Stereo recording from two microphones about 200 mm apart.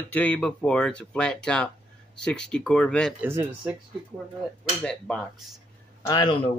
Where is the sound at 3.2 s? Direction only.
10° right (ahead or behind).